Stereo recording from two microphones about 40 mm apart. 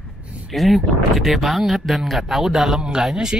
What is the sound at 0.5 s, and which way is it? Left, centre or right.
Speech, centre.